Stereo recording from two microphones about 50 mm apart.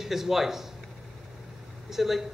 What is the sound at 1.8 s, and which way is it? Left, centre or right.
Speech, centre.